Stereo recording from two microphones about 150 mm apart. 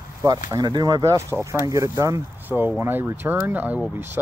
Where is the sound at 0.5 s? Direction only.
25° right (ahead or behind).